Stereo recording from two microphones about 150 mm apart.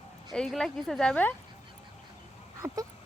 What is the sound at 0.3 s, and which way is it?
Speech, centre (ahead or behind).